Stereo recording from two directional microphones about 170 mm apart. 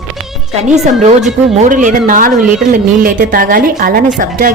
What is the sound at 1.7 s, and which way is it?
A woman's voice, 50° right (ahead or behind).